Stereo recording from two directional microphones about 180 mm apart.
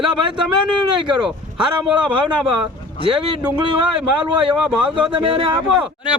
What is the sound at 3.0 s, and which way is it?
Speech, 25° right (ahead or behind).